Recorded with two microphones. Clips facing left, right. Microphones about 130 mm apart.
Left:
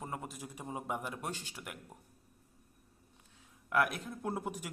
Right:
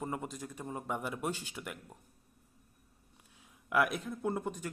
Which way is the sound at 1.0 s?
Centre (ahead or behind).